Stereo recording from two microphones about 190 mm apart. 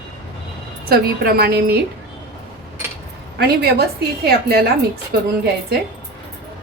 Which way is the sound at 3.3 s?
60° right (ahead or behind).